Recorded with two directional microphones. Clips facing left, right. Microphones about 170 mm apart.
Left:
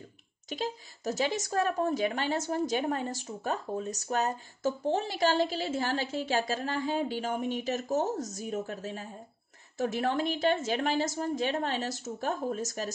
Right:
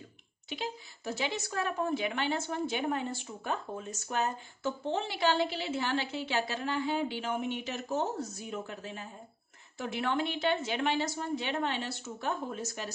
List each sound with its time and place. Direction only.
0.5 s a woman's voice: 45° left (ahead or behind)